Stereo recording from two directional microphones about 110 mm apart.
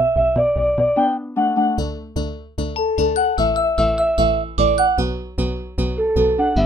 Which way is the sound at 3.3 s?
40° left (ahead or behind).